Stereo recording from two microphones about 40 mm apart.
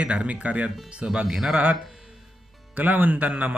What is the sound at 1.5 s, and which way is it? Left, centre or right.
Speech, right.